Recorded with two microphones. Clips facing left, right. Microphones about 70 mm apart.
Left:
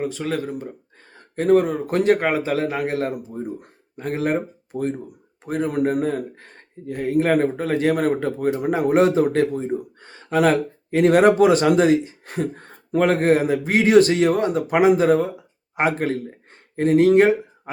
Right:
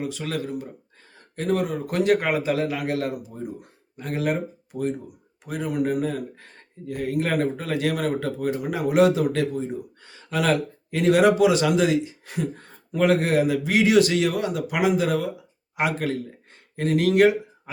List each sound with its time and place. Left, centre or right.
0.0 s a man's voice: left